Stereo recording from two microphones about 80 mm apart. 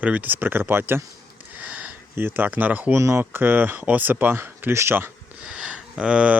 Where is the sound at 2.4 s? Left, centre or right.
Centre.